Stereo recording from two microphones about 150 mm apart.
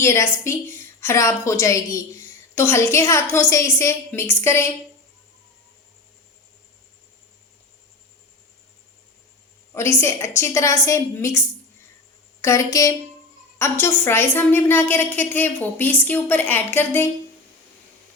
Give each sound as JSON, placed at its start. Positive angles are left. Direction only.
{"t": 0.0, "sound": "a woman's voice", "side_deg": 20}
{"t": 9.7, "sound": "a woman's voice", "side_deg": 15}